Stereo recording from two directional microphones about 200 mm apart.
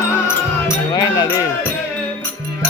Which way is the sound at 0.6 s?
20° left (ahead or behind).